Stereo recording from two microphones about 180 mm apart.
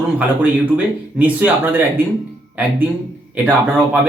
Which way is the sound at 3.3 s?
10° right (ahead or behind).